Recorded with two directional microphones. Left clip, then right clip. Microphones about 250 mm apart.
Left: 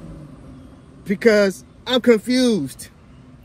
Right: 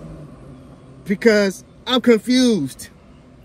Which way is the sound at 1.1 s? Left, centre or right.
Centre.